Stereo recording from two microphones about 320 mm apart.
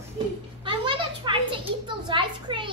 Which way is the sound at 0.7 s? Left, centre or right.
Centre.